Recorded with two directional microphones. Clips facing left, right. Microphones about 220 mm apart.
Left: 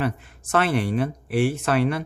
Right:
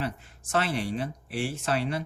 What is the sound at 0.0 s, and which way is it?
Speech, 60° left (ahead or behind).